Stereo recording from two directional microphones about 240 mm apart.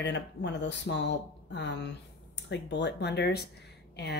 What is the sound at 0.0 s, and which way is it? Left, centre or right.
Speech, left.